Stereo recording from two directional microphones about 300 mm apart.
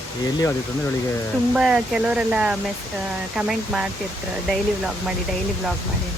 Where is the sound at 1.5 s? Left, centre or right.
Centre.